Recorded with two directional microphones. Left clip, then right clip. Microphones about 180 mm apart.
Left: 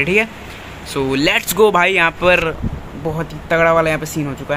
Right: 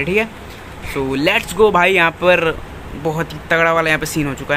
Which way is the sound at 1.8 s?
Centre (ahead or behind).